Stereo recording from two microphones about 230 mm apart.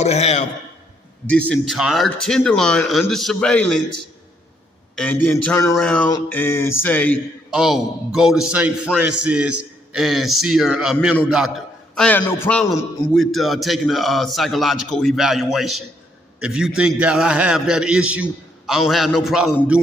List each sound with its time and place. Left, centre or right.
0.0 s a man's voice: left
1.3 s a man's voice: centre
4.9 s mantra: centre
5.7 s a man's voice: centre
6.1 s mantra: centre
7.5 s a man's voice: centre